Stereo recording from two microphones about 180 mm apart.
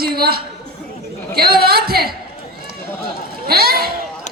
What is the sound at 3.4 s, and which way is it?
Speech, 55° right (ahead or behind).